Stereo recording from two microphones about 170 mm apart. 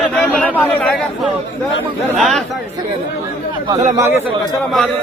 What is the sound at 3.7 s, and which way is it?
Speech, 20° right (ahead or behind).